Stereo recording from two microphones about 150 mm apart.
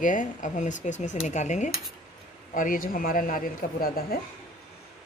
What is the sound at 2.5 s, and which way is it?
Speech, 65° left (ahead or behind).